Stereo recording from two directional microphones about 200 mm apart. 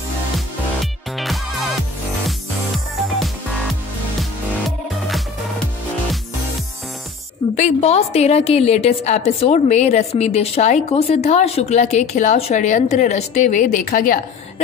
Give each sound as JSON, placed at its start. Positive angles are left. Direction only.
{"t": 1.1, "sound": "music", "side_deg": 0}
{"t": 4.2, "sound": "music", "side_deg": 0}
{"t": 7.5, "sound": "a woman's voice", "side_deg": 35}